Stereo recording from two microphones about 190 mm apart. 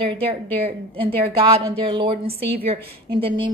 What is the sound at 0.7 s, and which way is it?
A woman's voice, 30° right (ahead or behind).